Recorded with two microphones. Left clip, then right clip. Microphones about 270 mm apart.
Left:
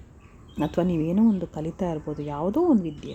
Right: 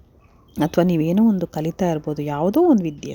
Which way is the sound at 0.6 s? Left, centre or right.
Right.